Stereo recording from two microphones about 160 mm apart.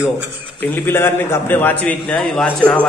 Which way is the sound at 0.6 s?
10° left (ahead or behind).